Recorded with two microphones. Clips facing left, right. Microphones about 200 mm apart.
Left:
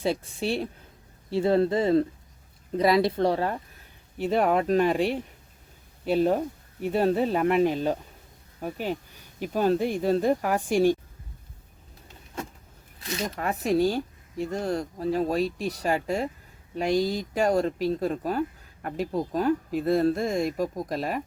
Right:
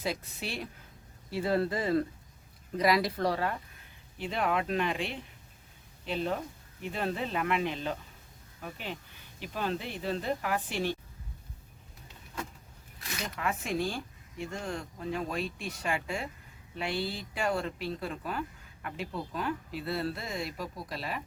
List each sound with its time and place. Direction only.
0.0 s speech: 30° left (ahead or behind)
4.2 s speech: 45° left (ahead or behind)
6.8 s speech: 40° left (ahead or behind)
13.0 s speech: 35° left (ahead or behind)